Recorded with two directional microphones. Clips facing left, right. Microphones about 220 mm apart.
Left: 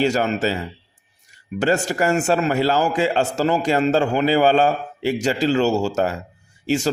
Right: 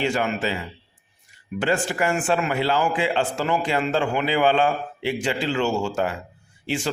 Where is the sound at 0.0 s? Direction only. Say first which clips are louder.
Left 4 dB; 40° left (ahead or behind).